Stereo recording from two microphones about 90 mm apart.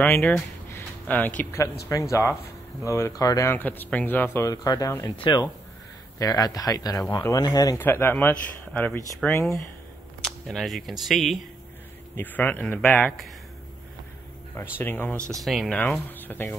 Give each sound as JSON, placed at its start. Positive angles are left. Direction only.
{"t": 0.0, "sound": "a man's voice", "side_deg": 20}
{"t": 1.5, "sound": "speech", "side_deg": 35}
{"t": 3.4, "sound": "a man's voice", "side_deg": 20}
{"t": 4.5, "sound": "speech", "side_deg": 45}
{"t": 5.2, "sound": "speech", "side_deg": 60}
{"t": 6.1, "sound": "speech", "side_deg": 45}
{"t": 7.7, "sound": "a man's voice", "side_deg": 25}
{"t": 9.3, "sound": "speech", "side_deg": 30}
{"t": 10.2, "sound": "speech", "side_deg": 5}
{"t": 12.2, "sound": "a man's voice", "side_deg": 20}
{"t": 14.5, "sound": "a man's voice", "side_deg": 25}
{"t": 15.4, "sound": "speech", "side_deg": 0}
{"t": 15.8, "sound": "a man's voice", "side_deg": 20}